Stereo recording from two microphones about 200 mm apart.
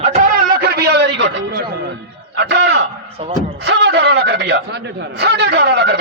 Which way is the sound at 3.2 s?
35° right (ahead or behind).